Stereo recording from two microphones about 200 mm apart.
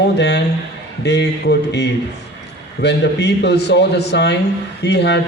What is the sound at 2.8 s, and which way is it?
A man's voice, 60° left (ahead or behind).